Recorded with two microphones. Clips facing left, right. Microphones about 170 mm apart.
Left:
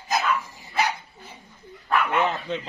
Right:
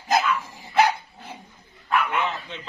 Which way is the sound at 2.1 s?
40° left (ahead or behind).